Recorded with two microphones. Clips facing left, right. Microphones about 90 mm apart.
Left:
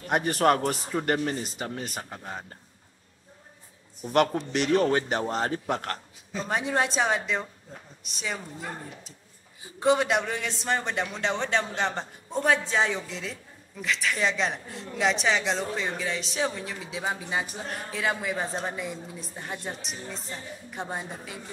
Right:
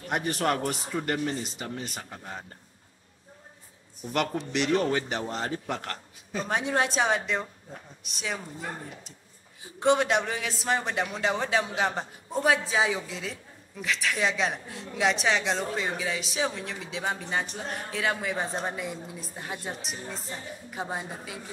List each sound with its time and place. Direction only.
0.1 s speech: 45° left (ahead or behind)
4.0 s a man's voice: 45° left (ahead or behind)
5.3 s speech: 45° left (ahead or behind)
6.4 s a man's voice: centre (ahead or behind)